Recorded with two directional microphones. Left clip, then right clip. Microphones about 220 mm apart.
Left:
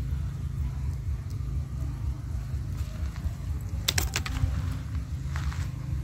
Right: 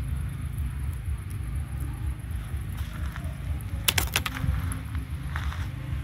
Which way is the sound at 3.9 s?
30° right (ahead or behind).